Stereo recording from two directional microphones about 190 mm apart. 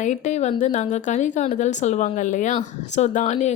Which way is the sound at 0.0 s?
40° left (ahead or behind).